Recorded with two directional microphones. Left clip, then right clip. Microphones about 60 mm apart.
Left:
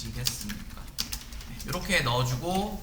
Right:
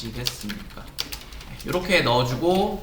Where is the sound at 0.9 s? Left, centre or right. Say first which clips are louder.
Right 3 dB; left.